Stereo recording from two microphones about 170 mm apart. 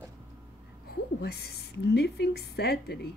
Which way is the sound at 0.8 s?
70° left (ahead or behind).